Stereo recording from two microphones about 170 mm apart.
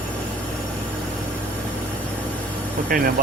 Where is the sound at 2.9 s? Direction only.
55° right (ahead or behind).